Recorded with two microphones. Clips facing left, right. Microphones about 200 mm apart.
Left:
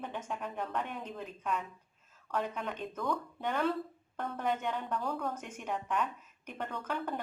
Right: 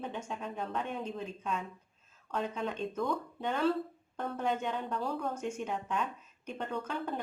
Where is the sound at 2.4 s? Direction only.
25° right (ahead or behind).